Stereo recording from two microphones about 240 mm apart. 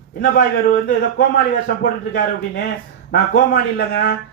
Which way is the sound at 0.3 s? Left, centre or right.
Left.